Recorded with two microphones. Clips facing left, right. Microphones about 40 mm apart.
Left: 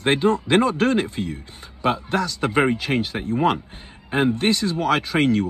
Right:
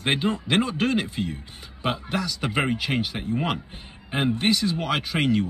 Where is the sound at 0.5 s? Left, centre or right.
Left.